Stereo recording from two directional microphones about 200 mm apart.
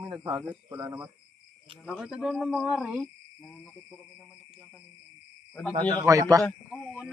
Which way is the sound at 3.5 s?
10° left (ahead or behind).